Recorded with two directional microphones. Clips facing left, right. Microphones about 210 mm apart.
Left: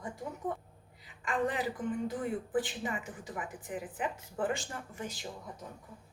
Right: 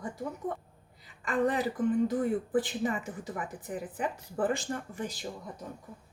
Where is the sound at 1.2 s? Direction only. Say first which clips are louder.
Right 4 dB; 40° right (ahead or behind).